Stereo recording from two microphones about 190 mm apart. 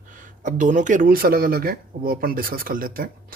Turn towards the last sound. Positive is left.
turn(degrees=-50)  # may be behind; listen again after turning